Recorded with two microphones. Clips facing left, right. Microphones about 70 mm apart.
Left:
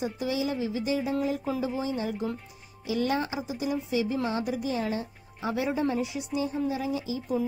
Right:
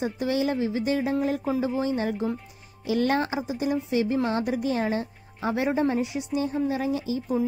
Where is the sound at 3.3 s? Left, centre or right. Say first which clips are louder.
Right 4 dB; right.